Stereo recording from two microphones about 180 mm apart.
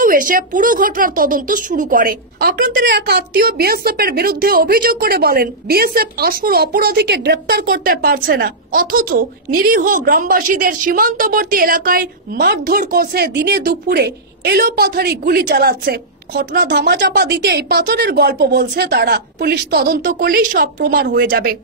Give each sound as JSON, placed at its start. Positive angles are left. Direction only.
{"t": 0.0, "sound": "speech", "side_deg": -50}
{"t": 20.0, "sound": "speech", "side_deg": -50}